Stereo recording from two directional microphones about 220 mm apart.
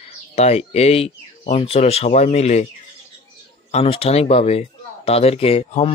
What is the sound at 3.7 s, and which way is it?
Speech, 25° left (ahead or behind).